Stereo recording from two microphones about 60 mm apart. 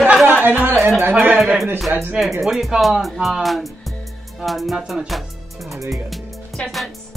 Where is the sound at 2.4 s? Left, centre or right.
Centre.